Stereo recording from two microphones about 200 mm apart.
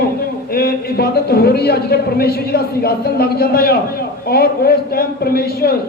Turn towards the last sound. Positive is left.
turn(degrees=50)  # may be behind; listen again after turning